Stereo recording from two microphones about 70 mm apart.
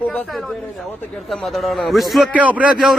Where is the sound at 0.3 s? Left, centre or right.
Centre.